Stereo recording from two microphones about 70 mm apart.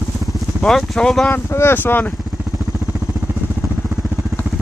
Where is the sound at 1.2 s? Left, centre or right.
Left.